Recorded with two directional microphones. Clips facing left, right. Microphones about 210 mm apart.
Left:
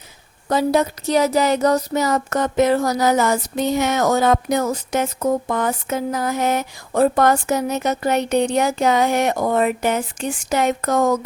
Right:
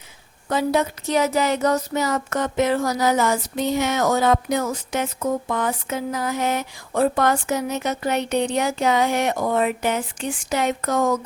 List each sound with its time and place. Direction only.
0.4 s speech: 40° left (ahead or behind)